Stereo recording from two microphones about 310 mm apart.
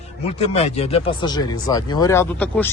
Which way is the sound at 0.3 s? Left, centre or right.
Centre.